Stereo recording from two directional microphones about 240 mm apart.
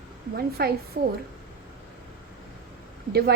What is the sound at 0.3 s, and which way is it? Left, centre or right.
Speech, right.